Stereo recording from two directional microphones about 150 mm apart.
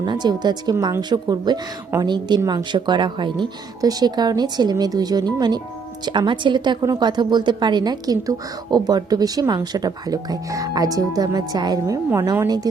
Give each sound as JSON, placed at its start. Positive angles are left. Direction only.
{"t": 0.0, "sound": "a woman's voice", "side_deg": -30}